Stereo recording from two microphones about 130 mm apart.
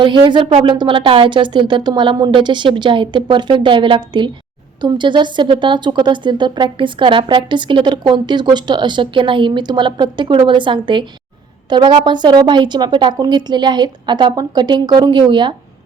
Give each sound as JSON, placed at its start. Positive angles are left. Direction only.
{"t": 0.0, "sound": "a woman's voice", "side_deg": -40}